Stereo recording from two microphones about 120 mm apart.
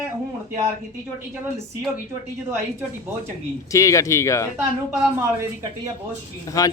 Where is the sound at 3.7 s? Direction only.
25° left (ahead or behind).